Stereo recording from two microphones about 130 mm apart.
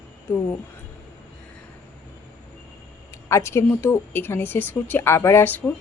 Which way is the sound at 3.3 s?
20° left (ahead or behind).